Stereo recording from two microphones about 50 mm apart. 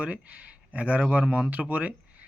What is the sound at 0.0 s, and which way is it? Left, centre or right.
Speech, right.